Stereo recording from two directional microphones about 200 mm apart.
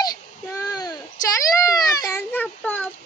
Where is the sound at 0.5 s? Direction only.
15° left (ahead or behind).